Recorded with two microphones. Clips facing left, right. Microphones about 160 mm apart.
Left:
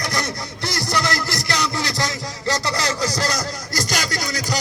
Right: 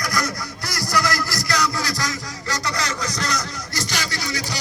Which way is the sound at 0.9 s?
25° left (ahead or behind).